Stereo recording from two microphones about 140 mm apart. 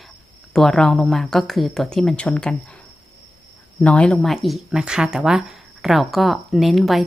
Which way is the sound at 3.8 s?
10° left (ahead or behind).